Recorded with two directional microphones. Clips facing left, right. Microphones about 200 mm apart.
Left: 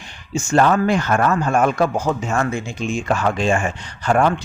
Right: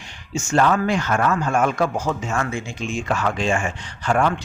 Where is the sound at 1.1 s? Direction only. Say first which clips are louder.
Left 3 dB; 40° left (ahead or behind).